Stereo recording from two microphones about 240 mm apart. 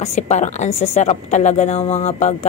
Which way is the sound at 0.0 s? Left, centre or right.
Left.